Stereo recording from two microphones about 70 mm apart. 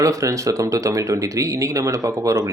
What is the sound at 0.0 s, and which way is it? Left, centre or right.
Speech, right.